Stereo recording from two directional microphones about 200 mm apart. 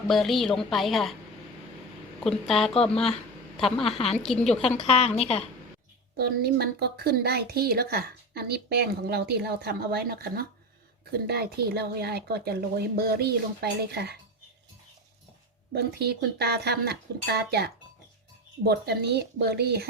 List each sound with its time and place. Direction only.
0.1 s a woman's voice: centre (ahead or behind)
2.2 s a woman's voice: centre (ahead or behind)
4.8 s a woman's voice: 30° left (ahead or behind)
6.1 s a woman's voice: 50° right (ahead or behind)
15.7 s a woman's voice: 55° right (ahead or behind)